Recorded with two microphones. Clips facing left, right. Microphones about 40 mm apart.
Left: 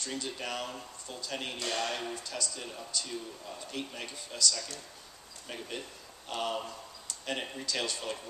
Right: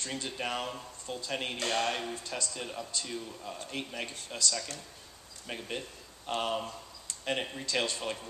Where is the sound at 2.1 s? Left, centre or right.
Right.